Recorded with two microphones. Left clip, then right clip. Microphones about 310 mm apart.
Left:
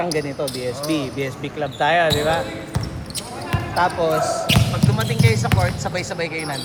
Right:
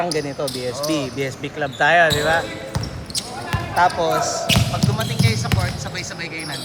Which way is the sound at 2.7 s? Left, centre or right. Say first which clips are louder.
Right 2 dB; centre.